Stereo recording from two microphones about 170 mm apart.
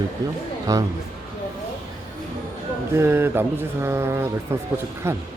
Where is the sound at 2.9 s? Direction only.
15° right (ahead or behind).